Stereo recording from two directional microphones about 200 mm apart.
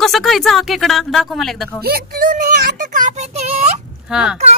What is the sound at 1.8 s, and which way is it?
Child singing, 50° right (ahead or behind).